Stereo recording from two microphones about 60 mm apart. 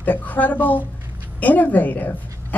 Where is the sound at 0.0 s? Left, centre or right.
Left.